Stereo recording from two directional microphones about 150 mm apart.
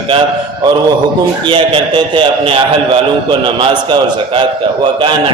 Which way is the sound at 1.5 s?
30° right (ahead or behind).